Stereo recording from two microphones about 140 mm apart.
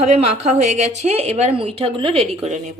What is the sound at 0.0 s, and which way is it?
A woman's voice, 50° right (ahead or behind).